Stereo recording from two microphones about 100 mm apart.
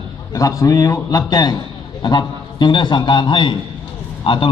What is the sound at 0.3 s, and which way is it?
A man's voice, 35° left (ahead or behind).